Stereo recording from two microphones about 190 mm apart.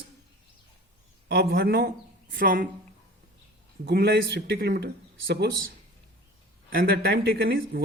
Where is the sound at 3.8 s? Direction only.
60° right (ahead or behind).